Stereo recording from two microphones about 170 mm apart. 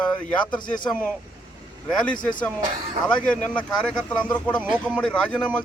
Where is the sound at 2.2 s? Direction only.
25° left (ahead or behind).